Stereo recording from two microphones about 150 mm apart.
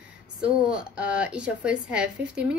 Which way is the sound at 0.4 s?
5° right (ahead or behind).